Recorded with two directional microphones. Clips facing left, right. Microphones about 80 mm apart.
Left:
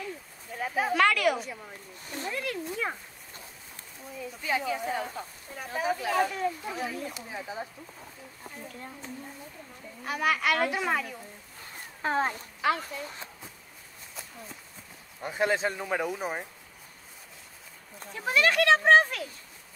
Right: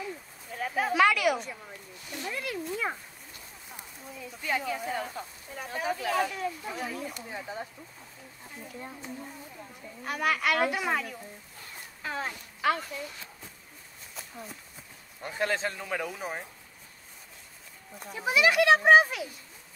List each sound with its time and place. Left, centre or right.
0.5 s a sound: centre
2.0 s speech: left
2.3 s speech: centre
4.2 s speech: centre
8.6 s speech: centre
12.0 s speech: left
12.6 s speech: centre
15.2 s speech: centre
17.9 s speech: centre